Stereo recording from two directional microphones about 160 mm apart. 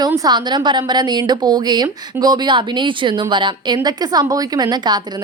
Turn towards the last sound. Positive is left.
turn(degrees=-25)  # may be behind; listen again after turning